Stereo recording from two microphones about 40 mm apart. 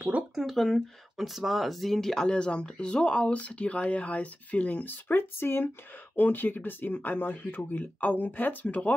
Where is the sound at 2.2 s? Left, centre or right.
Left.